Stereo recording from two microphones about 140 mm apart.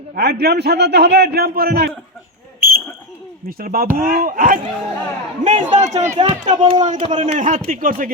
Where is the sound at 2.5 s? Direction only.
90° right.